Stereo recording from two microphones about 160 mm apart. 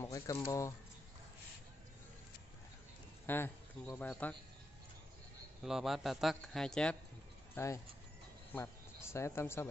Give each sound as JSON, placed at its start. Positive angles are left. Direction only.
{"t": 0.0, "sound": "speech", "side_deg": 20}
{"t": 3.3, "sound": "speech", "side_deg": 10}
{"t": 5.6, "sound": "a man's voice", "side_deg": 0}
{"t": 7.5, "sound": "speech", "side_deg": 20}